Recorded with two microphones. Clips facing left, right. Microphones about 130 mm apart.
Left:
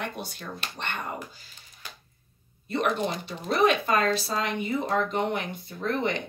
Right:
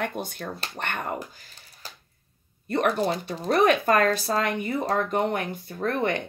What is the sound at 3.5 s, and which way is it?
Speech, 50° right (ahead or behind).